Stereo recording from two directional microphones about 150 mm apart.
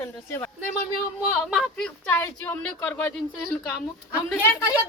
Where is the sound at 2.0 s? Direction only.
15° left (ahead or behind).